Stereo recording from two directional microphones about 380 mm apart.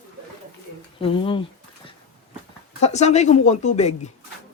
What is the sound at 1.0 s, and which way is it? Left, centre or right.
Speech, centre.